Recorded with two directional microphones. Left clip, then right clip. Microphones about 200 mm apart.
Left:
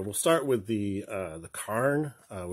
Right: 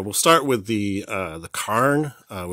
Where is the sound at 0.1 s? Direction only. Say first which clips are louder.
Right 8 dB; 45° right (ahead or behind).